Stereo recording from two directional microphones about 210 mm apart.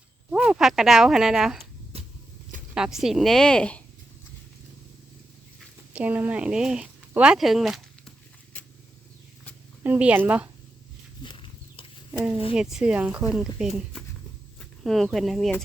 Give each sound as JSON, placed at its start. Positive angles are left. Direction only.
{"t": 0.3, "sound": "speech", "side_deg": -5}
{"t": 1.9, "sound": "vehicle", "side_deg": -30}
{"t": 2.7, "sound": "speech", "side_deg": -5}
{"t": 5.5, "sound": "speech", "side_deg": -5}
{"t": 9.8, "sound": "speech", "side_deg": -5}
{"t": 11.2, "sound": "a sound", "side_deg": 25}
{"t": 12.5, "sound": "speech", "side_deg": -5}